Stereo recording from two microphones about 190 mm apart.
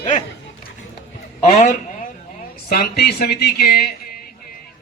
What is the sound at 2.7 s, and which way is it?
A man's voice, 55° left (ahead or behind).